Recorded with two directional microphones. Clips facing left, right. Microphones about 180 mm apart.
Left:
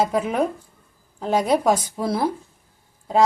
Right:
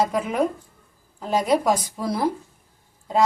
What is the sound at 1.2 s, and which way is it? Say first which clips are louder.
Speech: left 1 dB; 25° left (ahead or behind).